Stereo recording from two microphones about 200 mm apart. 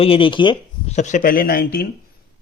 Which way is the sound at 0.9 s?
40° left (ahead or behind).